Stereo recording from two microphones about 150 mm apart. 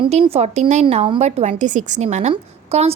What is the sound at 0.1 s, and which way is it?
Speech, 45° right (ahead or behind).